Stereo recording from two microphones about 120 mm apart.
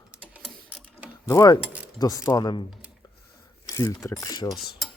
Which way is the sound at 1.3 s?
30° left (ahead or behind).